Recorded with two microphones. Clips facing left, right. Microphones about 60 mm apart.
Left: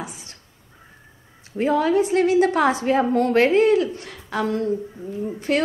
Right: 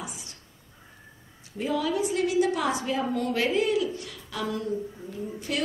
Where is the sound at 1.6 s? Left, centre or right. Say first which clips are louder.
Left 8 dB; left.